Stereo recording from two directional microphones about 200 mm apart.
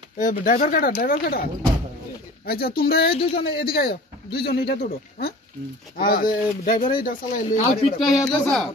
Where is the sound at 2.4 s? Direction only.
50° left (ahead or behind).